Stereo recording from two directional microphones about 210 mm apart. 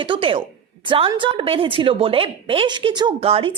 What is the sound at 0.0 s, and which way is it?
A woman's voice, 25° right (ahead or behind).